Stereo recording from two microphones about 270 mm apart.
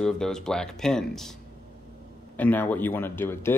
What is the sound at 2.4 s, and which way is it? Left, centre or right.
Speech, centre.